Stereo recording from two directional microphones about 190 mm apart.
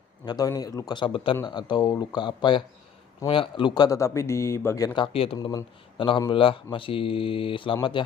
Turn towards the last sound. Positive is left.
turn(degrees=25)  # may be behind; listen again after turning